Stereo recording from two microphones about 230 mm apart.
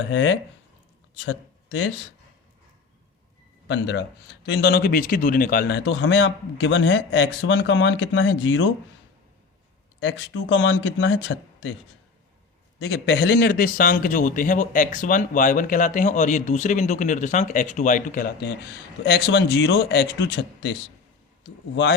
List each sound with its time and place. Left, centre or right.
0.0 s speech: left
3.7 s speech: left
10.0 s speech: left
12.8 s a man's voice: left